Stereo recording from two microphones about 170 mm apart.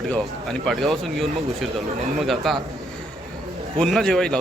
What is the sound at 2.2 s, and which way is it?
Speech, centre (ahead or behind).